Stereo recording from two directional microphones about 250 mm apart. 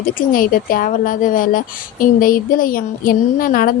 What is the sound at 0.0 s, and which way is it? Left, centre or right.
Speech, left.